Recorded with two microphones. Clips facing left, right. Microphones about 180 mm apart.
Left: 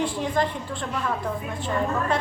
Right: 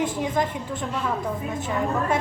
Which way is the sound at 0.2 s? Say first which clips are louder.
Even; 10° right (ahead or behind).